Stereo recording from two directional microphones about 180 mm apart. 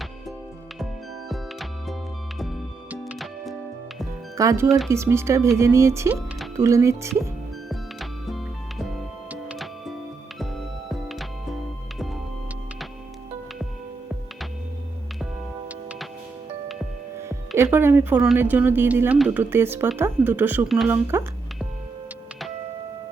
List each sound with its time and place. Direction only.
1.3 s music: centre (ahead or behind)
4.4 s speech: 15° right (ahead or behind)
7.7 s music: centre (ahead or behind)
15.7 s music: 5° right (ahead or behind)
17.2 s speech: 15° right (ahead or behind)